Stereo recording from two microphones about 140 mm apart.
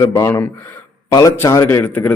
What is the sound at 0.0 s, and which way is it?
A man's voice, 20° left (ahead or behind).